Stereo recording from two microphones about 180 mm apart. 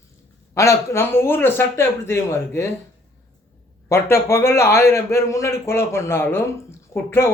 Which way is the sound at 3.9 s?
15° left (ahead or behind).